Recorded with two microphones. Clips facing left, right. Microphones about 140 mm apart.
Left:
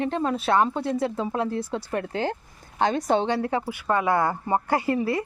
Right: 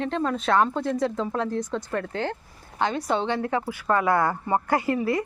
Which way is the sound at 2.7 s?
40° left (ahead or behind).